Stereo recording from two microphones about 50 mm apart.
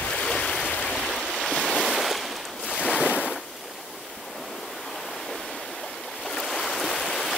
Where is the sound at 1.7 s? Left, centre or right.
Centre.